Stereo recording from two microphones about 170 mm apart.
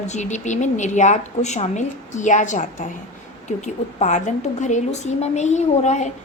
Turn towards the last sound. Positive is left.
turn(degrees=45)  # may be behind; listen again after turning